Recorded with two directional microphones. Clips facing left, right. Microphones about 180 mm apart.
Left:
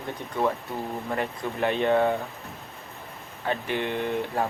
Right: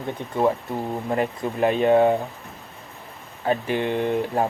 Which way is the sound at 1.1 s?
20° right (ahead or behind).